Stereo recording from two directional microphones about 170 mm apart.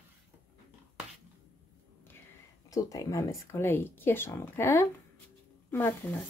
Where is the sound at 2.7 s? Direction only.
20° left (ahead or behind).